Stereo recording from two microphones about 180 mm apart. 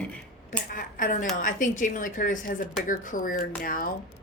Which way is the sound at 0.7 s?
45° left (ahead or behind).